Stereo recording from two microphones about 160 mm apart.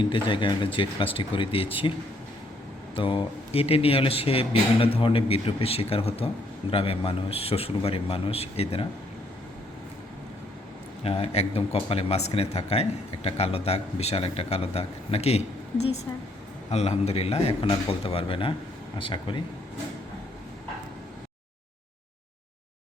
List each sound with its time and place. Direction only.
0.0 s speech: 30° left (ahead or behind)
2.9 s speech: 30° left (ahead or behind)
11.0 s speech: 40° left (ahead or behind)
16.6 s speech: 40° left (ahead or behind)